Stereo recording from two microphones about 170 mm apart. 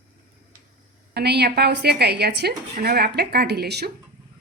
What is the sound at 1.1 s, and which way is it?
A woman's voice, 75° right (ahead or behind).